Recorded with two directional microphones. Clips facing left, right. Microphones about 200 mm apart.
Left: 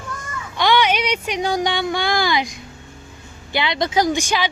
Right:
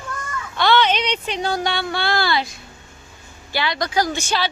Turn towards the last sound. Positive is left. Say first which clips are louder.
# left 3 dB
turn(degrees=15)  # may be behind; listen again after turning